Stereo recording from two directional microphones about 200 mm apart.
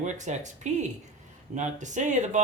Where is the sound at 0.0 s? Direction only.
35° right (ahead or behind).